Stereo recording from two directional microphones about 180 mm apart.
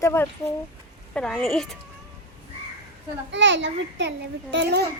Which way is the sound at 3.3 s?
85° right.